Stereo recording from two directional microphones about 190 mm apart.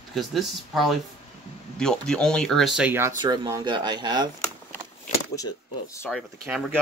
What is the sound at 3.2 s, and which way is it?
Speech, 20° right (ahead or behind).